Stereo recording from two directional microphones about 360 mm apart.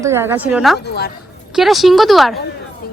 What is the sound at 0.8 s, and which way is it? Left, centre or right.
Speech, left.